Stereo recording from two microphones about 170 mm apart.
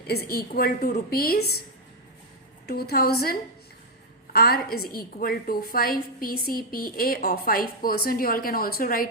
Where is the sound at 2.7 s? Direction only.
65° left (ahead or behind).